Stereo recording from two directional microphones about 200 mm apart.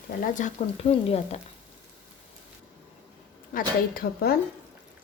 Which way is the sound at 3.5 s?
45° left (ahead or behind).